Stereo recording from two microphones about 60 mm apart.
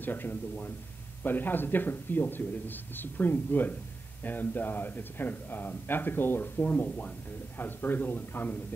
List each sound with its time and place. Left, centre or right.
0.0 s speech: left